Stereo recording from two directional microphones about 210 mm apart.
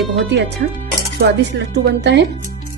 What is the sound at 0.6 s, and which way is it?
A woman's voice, 55° right (ahead or behind).